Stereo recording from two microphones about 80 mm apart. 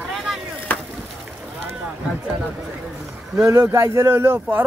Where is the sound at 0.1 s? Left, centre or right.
Centre.